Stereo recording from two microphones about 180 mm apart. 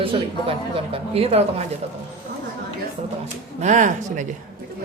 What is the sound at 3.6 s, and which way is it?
Speech, 45° right (ahead or behind).